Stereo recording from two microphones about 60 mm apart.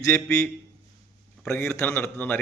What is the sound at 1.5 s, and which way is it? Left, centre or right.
Speech, left.